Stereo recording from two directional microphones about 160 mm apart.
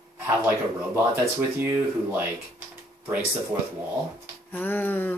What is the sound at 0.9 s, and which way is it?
Speech, 15° right (ahead or behind).